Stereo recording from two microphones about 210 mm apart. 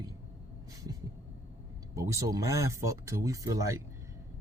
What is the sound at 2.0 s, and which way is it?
Speech, 15° right (ahead or behind).